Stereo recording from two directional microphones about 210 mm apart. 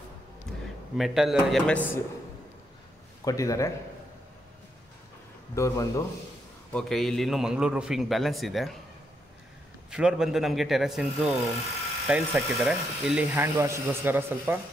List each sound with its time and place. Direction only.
0.5 s a sound: 5° left (ahead or behind)
0.9 s a man's voice: centre (ahead or behind)
3.3 s speech: 15° left (ahead or behind)
5.5 s speech: 15° left (ahead or behind)
6.7 s a man's voice: centre (ahead or behind)
9.8 s a man's voice: 5° right (ahead or behind)